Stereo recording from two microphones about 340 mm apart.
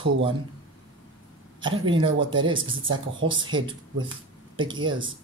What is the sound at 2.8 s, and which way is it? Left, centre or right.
Speech, right.